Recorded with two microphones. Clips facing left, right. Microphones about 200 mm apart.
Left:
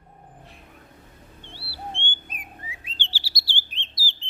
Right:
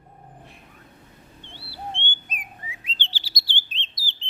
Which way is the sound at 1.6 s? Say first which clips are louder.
Right 1 dB; 20° right (ahead or behind).